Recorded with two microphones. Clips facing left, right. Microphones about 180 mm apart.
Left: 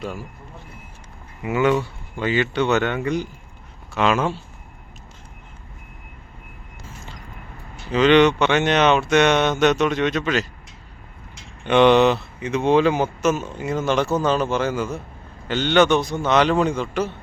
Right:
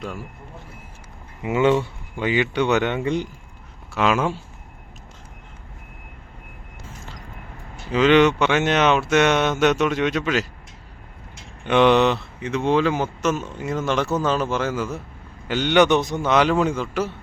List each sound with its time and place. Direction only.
1.4 s speech: 25° right (ahead or behind)
3.9 s speech: 5° right (ahead or behind)
7.9 s speech: 5° right (ahead or behind)
11.6 s speech: 5° right (ahead or behind)
12.5 s speech: 15° left (ahead or behind)
13.2 s speech: 5° left (ahead or behind); by 16.2 s 20° right (ahead or behind)
16.2 s speech: 10° right (ahead or behind)